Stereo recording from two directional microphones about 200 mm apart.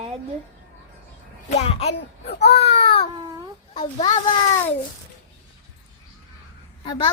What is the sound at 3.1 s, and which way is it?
Speech, 20° right (ahead or behind).